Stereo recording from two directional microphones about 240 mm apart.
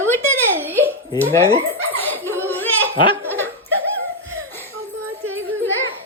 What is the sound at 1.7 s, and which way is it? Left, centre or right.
Speech, centre.